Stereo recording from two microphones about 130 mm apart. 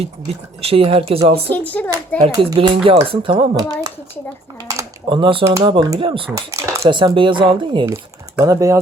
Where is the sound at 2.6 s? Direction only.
45° right (ahead or behind).